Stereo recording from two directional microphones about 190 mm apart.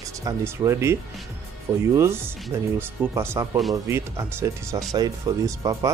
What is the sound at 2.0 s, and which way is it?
Speech, 15° right (ahead or behind).